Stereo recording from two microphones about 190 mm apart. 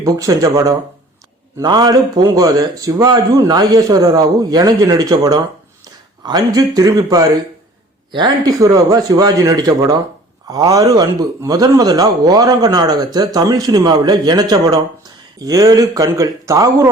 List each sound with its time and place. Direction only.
0.0 s a man's voice: 15° right (ahead or behind)